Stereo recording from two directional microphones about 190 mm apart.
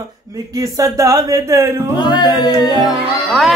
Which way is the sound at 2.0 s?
20° left (ahead or behind).